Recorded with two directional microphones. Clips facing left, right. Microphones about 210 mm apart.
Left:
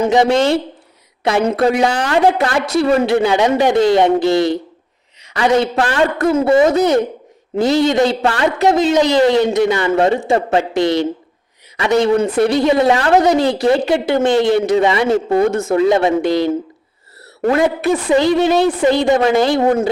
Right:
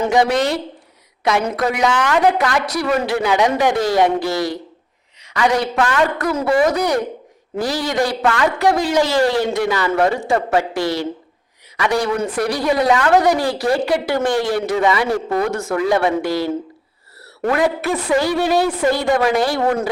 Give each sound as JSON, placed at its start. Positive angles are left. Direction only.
{"t": 0.0, "sound": "a woman's voice", "side_deg": 20}